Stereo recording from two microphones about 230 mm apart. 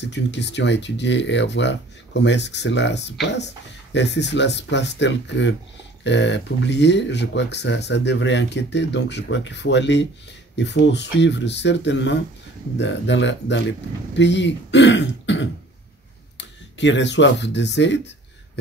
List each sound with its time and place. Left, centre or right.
0.0 s speech: left